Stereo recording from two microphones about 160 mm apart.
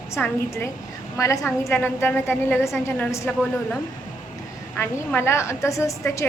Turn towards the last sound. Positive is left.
turn(degrees=20)  # may be behind; listen again after turning